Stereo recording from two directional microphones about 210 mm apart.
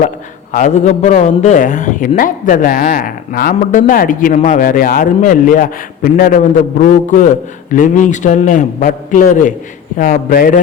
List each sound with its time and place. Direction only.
0.5 s a man's voice: 35° left (ahead or behind)